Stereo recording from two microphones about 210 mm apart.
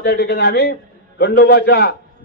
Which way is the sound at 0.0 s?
50° left (ahead or behind).